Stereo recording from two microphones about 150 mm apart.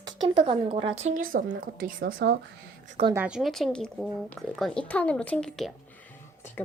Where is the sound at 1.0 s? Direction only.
65° right (ahead or behind).